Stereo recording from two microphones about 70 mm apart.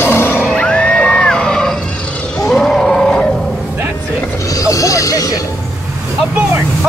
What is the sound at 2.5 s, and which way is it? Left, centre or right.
Grunt, centre.